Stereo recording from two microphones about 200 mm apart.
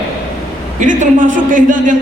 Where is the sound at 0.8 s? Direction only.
40° right (ahead or behind).